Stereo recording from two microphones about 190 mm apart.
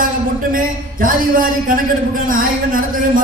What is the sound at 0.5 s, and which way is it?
A man's voice, 45° right (ahead or behind).